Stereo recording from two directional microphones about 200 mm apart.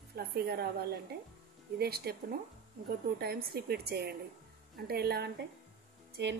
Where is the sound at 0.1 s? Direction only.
50° right (ahead or behind).